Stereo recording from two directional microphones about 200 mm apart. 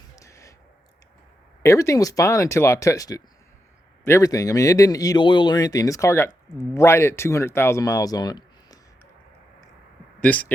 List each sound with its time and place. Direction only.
0.2 s a sound: 15° left (ahead or behind)
1.6 s speech: 15° left (ahead or behind)
10.2 s speech: 5° left (ahead or behind)